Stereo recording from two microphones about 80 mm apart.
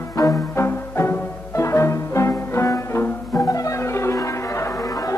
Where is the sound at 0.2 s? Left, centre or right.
Left.